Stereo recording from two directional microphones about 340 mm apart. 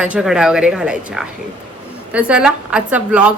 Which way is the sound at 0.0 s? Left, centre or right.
Centre.